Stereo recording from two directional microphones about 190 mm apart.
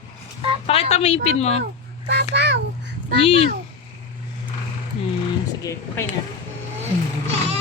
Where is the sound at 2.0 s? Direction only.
65° right (ahead or behind).